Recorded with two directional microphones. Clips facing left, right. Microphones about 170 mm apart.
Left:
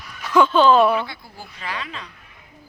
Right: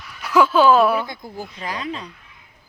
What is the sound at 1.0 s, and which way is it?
Speech, 45° right (ahead or behind).